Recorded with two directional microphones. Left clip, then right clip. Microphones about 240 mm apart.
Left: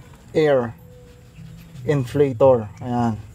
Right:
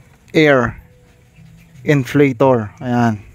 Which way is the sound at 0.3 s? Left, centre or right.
Right.